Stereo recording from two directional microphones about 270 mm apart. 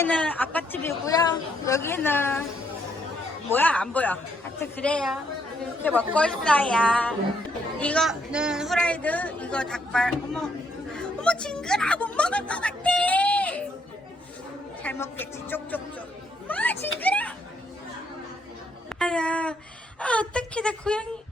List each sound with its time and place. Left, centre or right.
0.0 s a woman's voice: centre
3.5 s a man's voice: centre
14.8 s a woman's voice: centre
18.9 s a man's voice: centre